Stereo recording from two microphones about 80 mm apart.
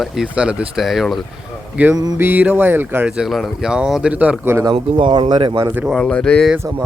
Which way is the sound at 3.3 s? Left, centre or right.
Centre.